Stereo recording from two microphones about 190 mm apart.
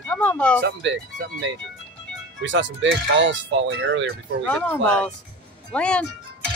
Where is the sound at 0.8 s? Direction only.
75° right (ahead or behind).